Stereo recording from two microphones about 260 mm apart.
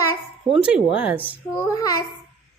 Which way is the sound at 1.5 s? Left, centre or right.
Centre.